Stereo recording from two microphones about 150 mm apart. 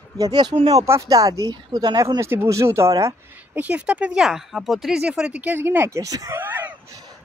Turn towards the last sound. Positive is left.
turn(degrees=-10)  # may be behind; listen again after turning